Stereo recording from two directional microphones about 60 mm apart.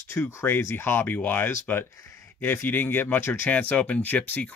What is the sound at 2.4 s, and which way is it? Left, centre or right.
Speech, left.